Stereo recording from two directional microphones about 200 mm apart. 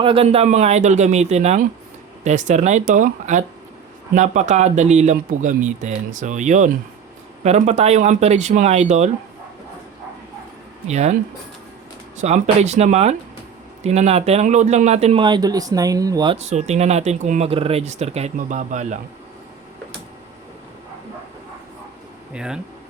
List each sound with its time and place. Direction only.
0.0 s a man's voice: 30° right (ahead or behind)
10.8 s a man's voice: 35° right (ahead or behind)
12.2 s a man's voice: 35° right (ahead or behind)
22.3 s speech: 5° right (ahead or behind)